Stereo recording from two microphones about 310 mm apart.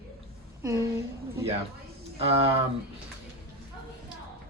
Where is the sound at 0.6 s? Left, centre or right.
Centre.